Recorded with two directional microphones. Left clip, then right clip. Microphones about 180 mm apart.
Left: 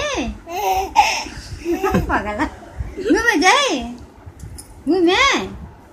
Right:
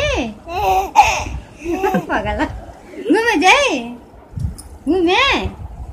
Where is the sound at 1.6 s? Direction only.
15° right (ahead or behind).